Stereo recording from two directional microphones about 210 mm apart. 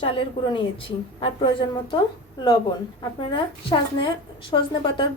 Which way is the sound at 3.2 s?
25° left (ahead or behind).